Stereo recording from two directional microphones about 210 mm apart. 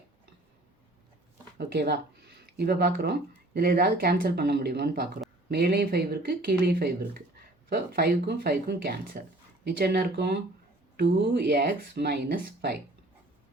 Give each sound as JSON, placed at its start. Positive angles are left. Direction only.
{"t": 1.5, "sound": "speech", "side_deg": -50}